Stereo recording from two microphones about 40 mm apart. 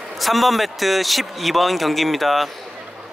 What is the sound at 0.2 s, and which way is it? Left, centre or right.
A man's voice, centre.